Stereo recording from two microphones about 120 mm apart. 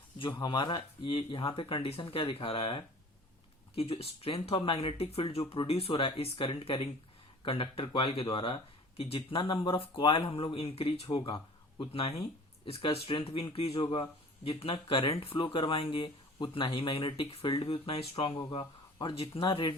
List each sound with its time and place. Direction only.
0.2 s speech: 40° left (ahead or behind)
16.0 s speech: 35° left (ahead or behind)
17.6 s speech: 55° left (ahead or behind)